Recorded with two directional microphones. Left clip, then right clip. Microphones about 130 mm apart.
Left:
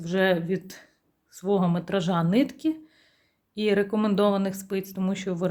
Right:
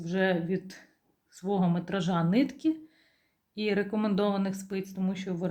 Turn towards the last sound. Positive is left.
turn(degrees=50)  # may be behind; listen again after turning